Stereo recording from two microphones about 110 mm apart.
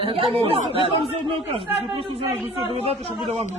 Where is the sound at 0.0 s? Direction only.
55° right (ahead or behind).